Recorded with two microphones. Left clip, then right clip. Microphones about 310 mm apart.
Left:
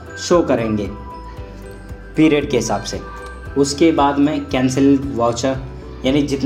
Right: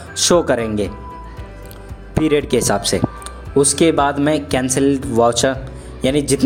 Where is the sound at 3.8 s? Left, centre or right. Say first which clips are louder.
Even; right.